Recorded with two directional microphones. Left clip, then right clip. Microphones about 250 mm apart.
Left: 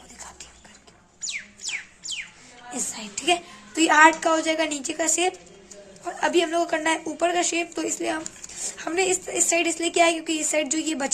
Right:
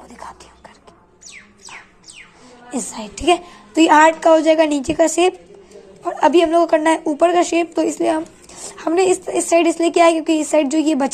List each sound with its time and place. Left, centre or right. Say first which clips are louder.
2.7 s a child's voice: right 5 dB; centre